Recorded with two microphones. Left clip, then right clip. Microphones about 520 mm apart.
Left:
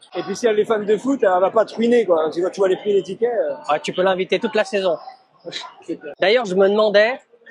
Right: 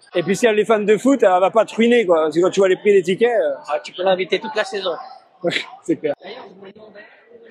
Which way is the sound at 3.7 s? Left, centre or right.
Left.